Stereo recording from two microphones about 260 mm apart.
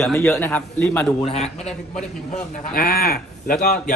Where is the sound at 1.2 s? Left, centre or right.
Left.